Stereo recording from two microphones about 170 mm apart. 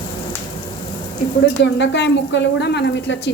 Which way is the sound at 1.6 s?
90° left.